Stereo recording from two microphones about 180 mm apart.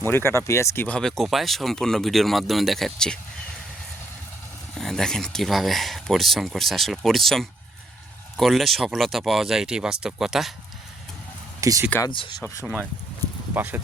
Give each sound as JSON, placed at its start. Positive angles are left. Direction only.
{"t": 0.0, "sound": "speech", "side_deg": 10}
{"t": 4.7, "sound": "speech", "side_deg": 0}
{"t": 11.6, "sound": "speech", "side_deg": -15}
{"t": 12.0, "sound": "speech", "side_deg": 25}
{"t": 12.6, "sound": "speech", "side_deg": 0}